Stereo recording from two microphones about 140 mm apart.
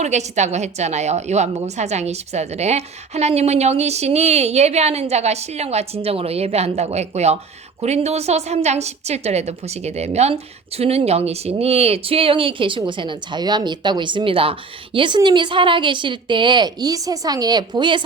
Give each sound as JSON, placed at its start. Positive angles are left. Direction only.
{"t": 0.0, "sound": "a woman's voice", "side_deg": -55}